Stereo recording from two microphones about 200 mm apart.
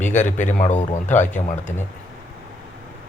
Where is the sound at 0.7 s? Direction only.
35° left (ahead or behind).